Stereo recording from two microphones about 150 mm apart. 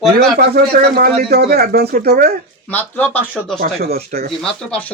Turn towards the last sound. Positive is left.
turn(degrees=10)  # may be behind; listen again after turning